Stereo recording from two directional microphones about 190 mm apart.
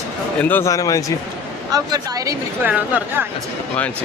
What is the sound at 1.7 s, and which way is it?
Speech, 20° right (ahead or behind).